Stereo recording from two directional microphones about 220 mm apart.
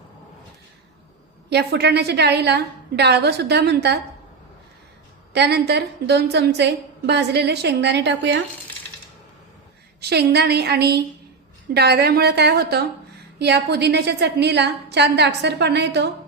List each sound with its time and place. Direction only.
1.5 s a woman's voice: 50° right (ahead or behind)
5.3 s a woman's voice: 50° right (ahead or behind)
10.0 s a woman's voice: 45° right (ahead or behind)